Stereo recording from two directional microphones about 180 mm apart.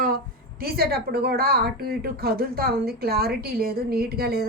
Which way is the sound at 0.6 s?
60° right (ahead or behind).